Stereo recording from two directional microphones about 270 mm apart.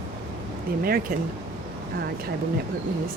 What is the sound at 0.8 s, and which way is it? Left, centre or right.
Speech, right.